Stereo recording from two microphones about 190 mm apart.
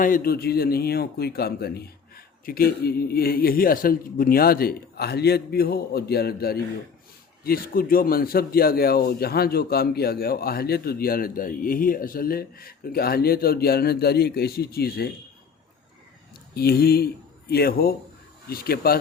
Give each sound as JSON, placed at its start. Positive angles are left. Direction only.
{"t": 0.0, "sound": "speech", "side_deg": 50}
{"t": 16.6, "sound": "speech", "side_deg": 55}